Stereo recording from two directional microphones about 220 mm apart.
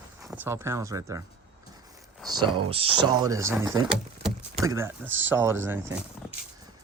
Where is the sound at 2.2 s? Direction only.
20° right (ahead or behind).